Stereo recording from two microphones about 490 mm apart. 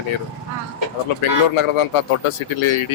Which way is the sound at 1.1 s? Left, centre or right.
Left.